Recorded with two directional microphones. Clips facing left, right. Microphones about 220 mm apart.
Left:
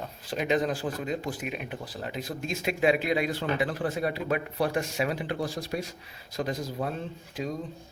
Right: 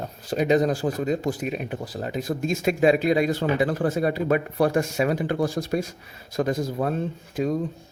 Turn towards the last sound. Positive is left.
turn(degrees=-50)  # may be behind; listen again after turning